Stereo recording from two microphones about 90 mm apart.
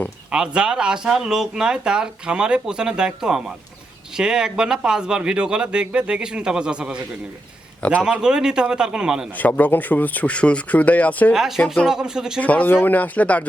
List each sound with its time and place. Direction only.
0.3 s speech: 10° right (ahead or behind)
8.0 s speech: 10° right (ahead or behind)
9.4 s speech: 20° left (ahead or behind)
11.3 s speech: 5° right (ahead or behind)
12.4 s speech: 15° left (ahead or behind)